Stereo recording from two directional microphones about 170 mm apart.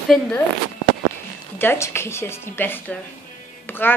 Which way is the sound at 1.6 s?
15° left (ahead or behind).